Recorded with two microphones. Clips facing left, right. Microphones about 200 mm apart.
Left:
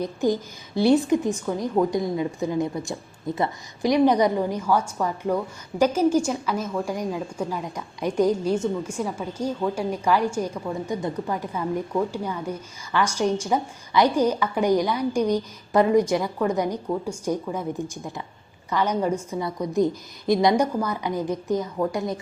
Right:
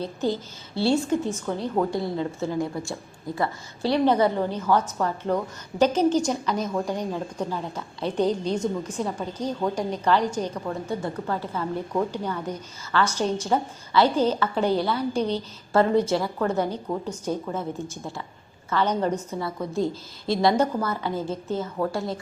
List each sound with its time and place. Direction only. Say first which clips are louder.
0.0 s a woman's voice: left 3 dB; 15° left (ahead or behind)